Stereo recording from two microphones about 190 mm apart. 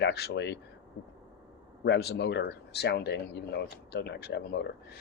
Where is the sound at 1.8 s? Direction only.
65° left (ahead or behind).